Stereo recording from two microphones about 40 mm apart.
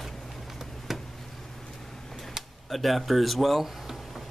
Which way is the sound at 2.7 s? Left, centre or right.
Centre.